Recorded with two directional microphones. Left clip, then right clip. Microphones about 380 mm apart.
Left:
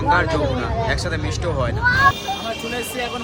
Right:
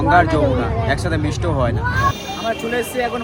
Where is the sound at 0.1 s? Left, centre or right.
Centre.